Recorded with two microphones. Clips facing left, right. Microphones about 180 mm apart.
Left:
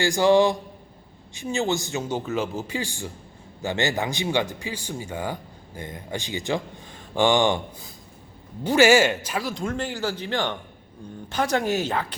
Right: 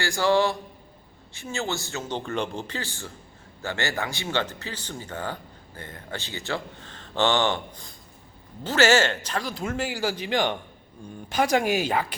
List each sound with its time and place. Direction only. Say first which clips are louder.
0.0 s speech: left 4 dB; 15° left (ahead or behind); by 12.1 s 10° right (ahead or behind)